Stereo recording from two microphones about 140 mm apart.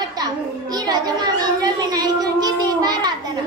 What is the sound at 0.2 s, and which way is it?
Children playing, 30° right (ahead or behind).